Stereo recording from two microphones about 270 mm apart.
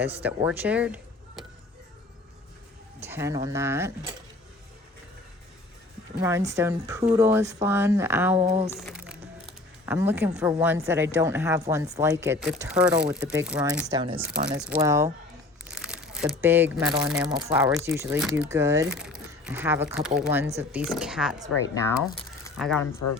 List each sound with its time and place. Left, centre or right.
0.2 s speech: centre
3.0 s speech: centre
6.2 s speech: centre
8.4 s speech: right
8.7 s music: centre
9.8 s speech: centre
22.5 s speech: centre
23.0 s speech: left